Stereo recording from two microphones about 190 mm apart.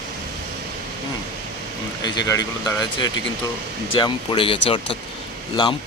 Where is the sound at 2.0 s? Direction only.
20° left (ahead or behind).